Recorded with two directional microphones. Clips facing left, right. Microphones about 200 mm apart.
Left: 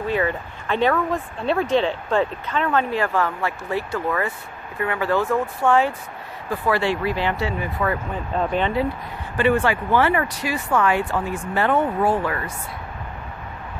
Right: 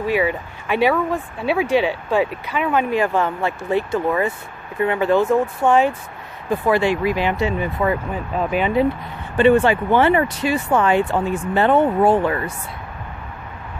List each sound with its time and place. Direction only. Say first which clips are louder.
0.1 s speech: right 3 dB; 10° right (ahead or behind)
8.4 s speech: right 2 dB; 10° right (ahead or behind)
9.4 s speech: right 5 dB; 25° right (ahead or behind)